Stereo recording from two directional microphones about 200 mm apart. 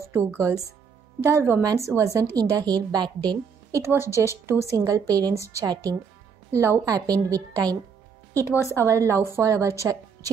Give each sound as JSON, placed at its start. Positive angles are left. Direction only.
{"t": 0.0, "sound": "a woman's voice", "side_deg": -10}
{"t": 8.3, "sound": "a woman's voice", "side_deg": 10}
{"t": 8.6, "sound": "a woman's voice", "side_deg": -15}